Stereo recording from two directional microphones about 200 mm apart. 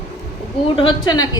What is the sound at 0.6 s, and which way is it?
Speech, 25° left (ahead or behind).